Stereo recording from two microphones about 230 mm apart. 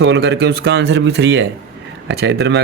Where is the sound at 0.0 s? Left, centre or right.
Right.